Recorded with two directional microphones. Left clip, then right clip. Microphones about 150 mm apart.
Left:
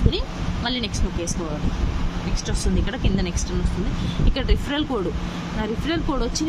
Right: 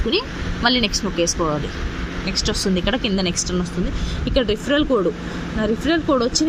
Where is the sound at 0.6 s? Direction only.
25° right (ahead or behind).